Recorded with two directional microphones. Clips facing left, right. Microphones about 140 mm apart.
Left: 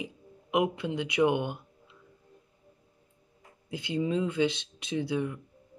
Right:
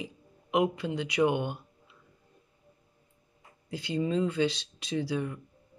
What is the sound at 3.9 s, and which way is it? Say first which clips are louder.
Speech: even; 10° left (ahead or behind).